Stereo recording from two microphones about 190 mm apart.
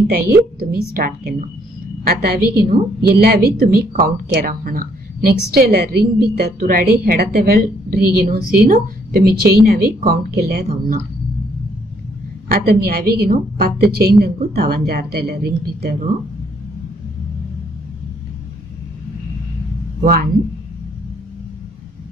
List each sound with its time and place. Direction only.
0.6 s a woman's voice: 50° right (ahead or behind)
12.4 s a woman's voice: 55° right (ahead or behind)